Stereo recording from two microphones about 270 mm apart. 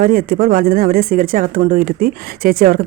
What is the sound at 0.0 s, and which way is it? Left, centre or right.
Speech, right.